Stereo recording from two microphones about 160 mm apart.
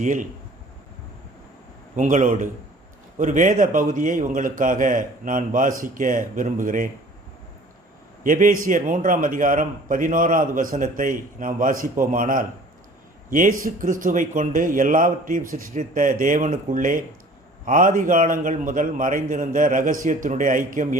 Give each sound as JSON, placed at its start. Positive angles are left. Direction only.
{"t": 0.0, "sound": "a man's voice", "side_deg": -55}
{"t": 2.0, "sound": "a man's voice", "side_deg": -50}
{"t": 8.2, "sound": "a man's voice", "side_deg": -55}